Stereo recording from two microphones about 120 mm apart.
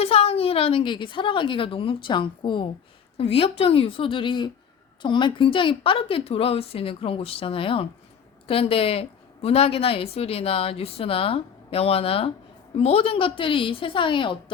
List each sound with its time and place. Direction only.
0.0 s a woman's voice: 55° left (ahead or behind)